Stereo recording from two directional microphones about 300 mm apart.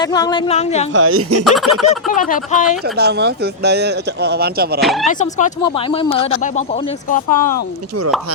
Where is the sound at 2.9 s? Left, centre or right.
Right.